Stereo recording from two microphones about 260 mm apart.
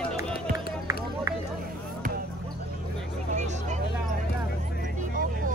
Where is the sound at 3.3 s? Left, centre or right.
Right.